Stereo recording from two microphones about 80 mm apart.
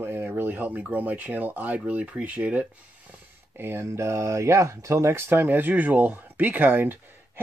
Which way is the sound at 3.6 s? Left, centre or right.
Right.